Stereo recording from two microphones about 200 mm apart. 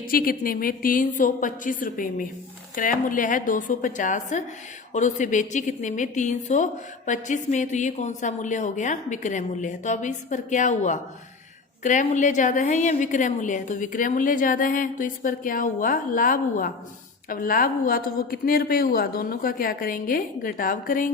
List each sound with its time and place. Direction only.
0.1 s a woman's voice: 45° left (ahead or behind)